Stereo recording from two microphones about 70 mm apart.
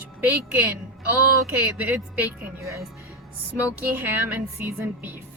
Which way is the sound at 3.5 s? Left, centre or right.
Right.